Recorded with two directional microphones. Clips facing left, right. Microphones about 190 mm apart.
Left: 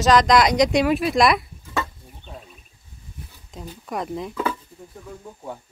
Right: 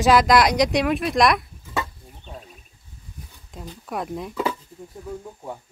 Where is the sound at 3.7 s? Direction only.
Centre (ahead or behind).